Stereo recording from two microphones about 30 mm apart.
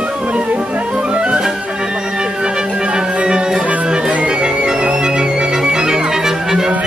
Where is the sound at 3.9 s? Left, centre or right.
Right; by 6.6 s centre.